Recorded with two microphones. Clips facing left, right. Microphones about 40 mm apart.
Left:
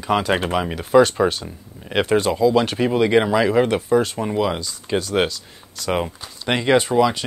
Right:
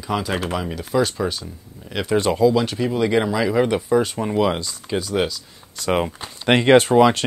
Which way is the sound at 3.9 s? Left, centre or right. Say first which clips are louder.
Left 1 dB; centre.